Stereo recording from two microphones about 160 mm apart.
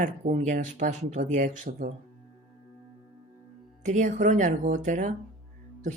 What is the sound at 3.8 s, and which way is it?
A woman's voice, 50° right (ahead or behind).